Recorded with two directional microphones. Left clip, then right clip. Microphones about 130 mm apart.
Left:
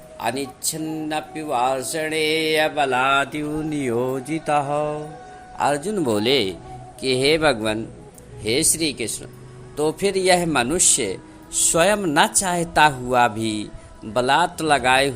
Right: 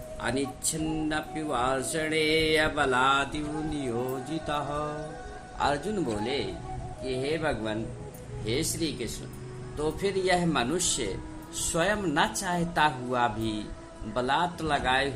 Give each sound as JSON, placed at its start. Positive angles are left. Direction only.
{"t": 0.2, "sound": "music", "side_deg": 15}
{"t": 3.0, "sound": "mantra", "side_deg": 35}
{"t": 3.7, "sound": "music", "side_deg": 50}
{"t": 4.7, "sound": "music", "side_deg": 15}
{"t": 5.5, "sound": "a man's voice", "side_deg": 30}
{"t": 7.0, "sound": "a man's voice", "side_deg": 90}
{"t": 8.4, "sound": "a man's voice", "side_deg": 65}